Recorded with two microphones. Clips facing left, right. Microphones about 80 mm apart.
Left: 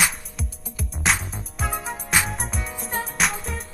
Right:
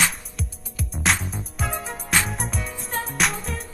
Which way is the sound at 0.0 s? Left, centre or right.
Centre.